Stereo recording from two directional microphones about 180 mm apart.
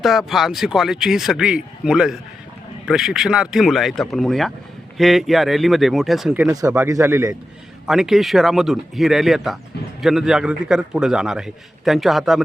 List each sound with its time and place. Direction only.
0.0 s a man's voice: centre (ahead or behind)
6.5 s speech: 20° right (ahead or behind)
7.9 s a man's voice: centre (ahead or behind)